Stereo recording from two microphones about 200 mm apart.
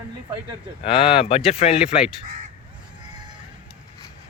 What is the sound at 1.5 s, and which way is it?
Speech, 30° left (ahead or behind).